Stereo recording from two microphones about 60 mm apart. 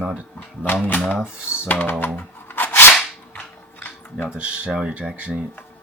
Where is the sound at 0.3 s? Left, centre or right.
Left.